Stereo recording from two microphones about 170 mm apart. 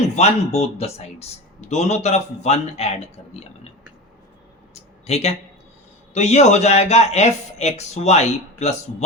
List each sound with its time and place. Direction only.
0.0 s speech: 40° left (ahead or behind)
4.7 s a sound: 40° left (ahead or behind)
6.1 s speech: 40° left (ahead or behind)